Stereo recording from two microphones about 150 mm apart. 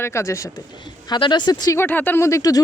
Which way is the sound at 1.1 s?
30° left (ahead or behind).